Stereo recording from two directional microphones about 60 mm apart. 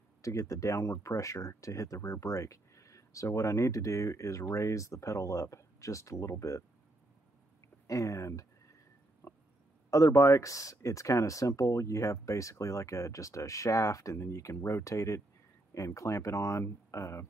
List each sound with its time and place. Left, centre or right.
0.2 s speech: left
7.8 s speech: left
9.2 s a sound: left
9.8 s speech: left